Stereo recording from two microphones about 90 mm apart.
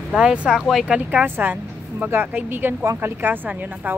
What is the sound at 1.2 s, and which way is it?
A woman's voice, 20° right (ahead or behind).